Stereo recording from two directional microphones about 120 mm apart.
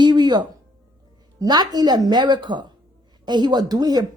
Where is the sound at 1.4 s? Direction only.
35° right (ahead or behind).